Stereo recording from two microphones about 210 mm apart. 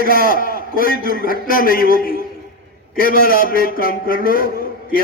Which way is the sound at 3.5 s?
45° left (ahead or behind).